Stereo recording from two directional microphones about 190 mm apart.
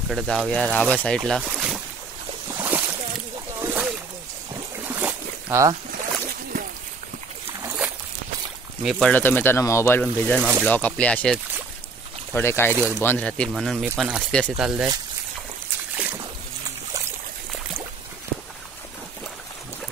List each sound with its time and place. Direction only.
0.1 s speech: centre (ahead or behind)
1.4 s boat: 5° right (ahead or behind)
3.5 s a sound: 10° right (ahead or behind)
4.8 s boat: 10° right (ahead or behind)
7.6 s boat: 5° right (ahead or behind)
8.8 s speech: 5° left (ahead or behind)
12.4 s speech: 10° left (ahead or behind); by 14.9 s 5° right (ahead or behind)